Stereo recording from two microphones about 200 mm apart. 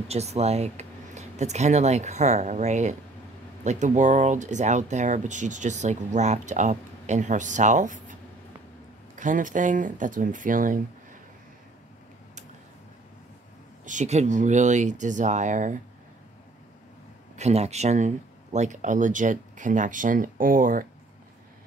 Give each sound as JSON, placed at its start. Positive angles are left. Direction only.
{"t": 0.1, "sound": "speech", "side_deg": -30}
{"t": 13.8, "sound": "speech", "side_deg": -35}
{"t": 17.4, "sound": "speech", "side_deg": -35}